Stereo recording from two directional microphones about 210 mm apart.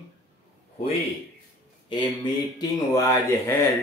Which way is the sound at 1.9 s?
20° left (ahead or behind).